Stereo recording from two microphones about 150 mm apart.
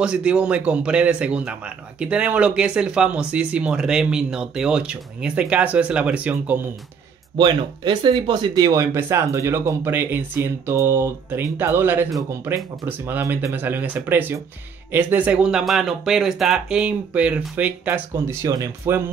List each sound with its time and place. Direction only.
0.0 s speech: 5° right (ahead or behind)
7.3 s speech: 30° right (ahead or behind)